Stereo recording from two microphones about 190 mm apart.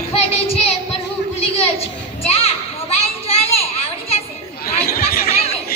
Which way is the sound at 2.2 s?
30° left (ahead or behind).